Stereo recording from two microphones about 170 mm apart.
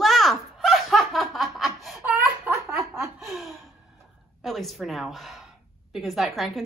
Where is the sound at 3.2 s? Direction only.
Centre (ahead or behind).